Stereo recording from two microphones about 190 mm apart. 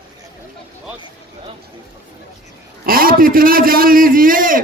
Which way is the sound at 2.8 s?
50° right (ahead or behind).